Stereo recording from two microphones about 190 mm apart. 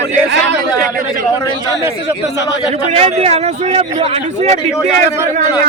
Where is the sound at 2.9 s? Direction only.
35° right (ahead or behind).